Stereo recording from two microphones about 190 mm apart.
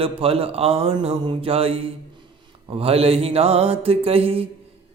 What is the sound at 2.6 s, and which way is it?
Music, 30° right (ahead or behind).